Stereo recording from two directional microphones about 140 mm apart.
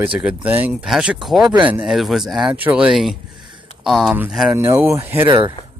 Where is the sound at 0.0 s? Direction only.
10° right (ahead or behind).